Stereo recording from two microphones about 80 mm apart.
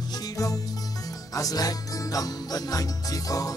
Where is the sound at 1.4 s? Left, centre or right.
Left.